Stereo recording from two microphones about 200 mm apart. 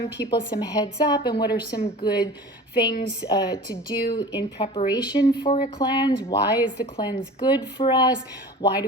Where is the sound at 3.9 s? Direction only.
50° left (ahead or behind).